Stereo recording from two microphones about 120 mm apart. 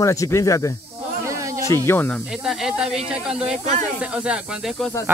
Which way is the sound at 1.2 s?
25° right (ahead or behind).